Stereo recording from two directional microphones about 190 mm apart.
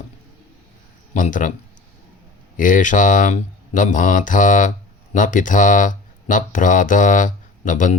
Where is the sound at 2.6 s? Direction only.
45° left (ahead or behind).